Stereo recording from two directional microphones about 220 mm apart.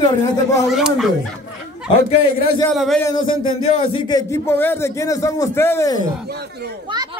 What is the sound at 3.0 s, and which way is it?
Speech, 20° left (ahead or behind).